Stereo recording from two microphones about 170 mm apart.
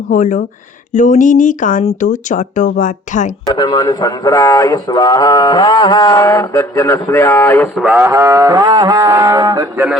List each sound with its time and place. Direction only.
0.1 s speech: 50° left (ahead or behind)
3.4 s speech: 25° left (ahead or behind)
7.8 s livestock: 10° right (ahead or behind)